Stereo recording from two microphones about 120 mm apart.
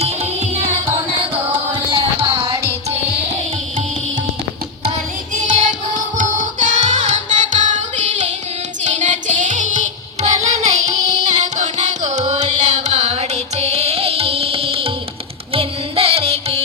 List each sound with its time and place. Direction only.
0.0 s music: 60° right (ahead or behind)
2.0 s music: 50° right (ahead or behind)
5.3 s music: 90° right
8.8 s music: 90° right; by 16.6 s 55° right (ahead or behind)